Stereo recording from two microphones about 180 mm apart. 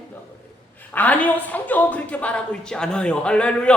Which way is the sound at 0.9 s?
10° left (ahead or behind).